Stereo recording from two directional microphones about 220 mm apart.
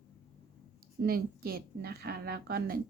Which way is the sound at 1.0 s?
45° right (ahead or behind).